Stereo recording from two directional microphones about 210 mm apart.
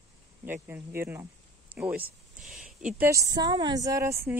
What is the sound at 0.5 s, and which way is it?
Speech, 10° right (ahead or behind).